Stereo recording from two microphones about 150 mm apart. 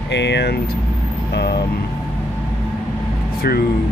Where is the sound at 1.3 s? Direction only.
90° left.